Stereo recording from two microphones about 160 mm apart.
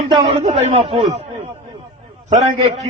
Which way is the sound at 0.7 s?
35° right (ahead or behind).